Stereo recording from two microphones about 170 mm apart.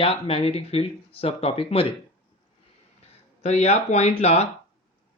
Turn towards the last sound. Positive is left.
turn(degrees=40)  # may be behind; listen again after turning